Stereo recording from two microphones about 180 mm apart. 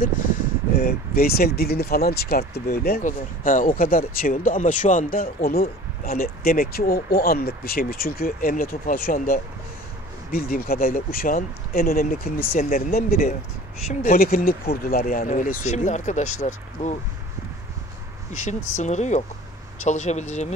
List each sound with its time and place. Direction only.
0.0 s speech: 50° left (ahead or behind)
18.4 s speech: 40° left (ahead or behind)